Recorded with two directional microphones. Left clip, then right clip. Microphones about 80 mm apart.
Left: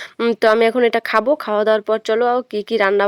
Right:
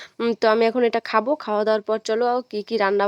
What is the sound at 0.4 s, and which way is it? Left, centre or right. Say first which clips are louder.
Speech: left 4 dB; left.